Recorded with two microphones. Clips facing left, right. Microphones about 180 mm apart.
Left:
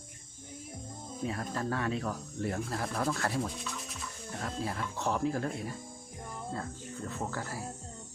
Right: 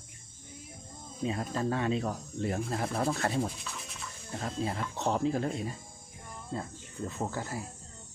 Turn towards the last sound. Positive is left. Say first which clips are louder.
# right 2 dB
turn(degrees=-20)  # may be behind; listen again after turning